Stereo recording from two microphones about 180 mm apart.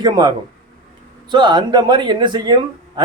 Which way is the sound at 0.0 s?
25° right (ahead or behind).